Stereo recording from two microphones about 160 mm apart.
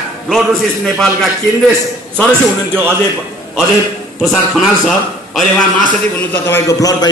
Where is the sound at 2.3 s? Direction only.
15° right (ahead or behind).